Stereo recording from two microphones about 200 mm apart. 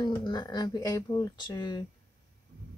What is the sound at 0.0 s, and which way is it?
Speech, 20° left (ahead or behind).